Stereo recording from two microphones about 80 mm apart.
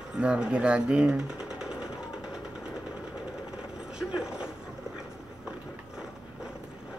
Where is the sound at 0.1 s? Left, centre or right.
Centre.